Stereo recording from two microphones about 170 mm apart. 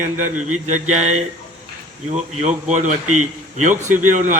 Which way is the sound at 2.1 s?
40° right (ahead or behind).